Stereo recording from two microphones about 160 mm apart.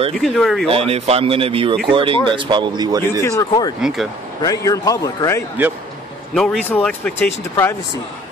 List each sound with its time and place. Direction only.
0.1 s speech: centre (ahead or behind)
0.7 s a man's voice: 35° right (ahead or behind)
3.1 s a man's voice: 20° left (ahead or behind)
3.8 s speech: centre (ahead or behind)
4.4 s a man's voice: 20° left (ahead or behind)
6.3 s speech: 5° left (ahead or behind)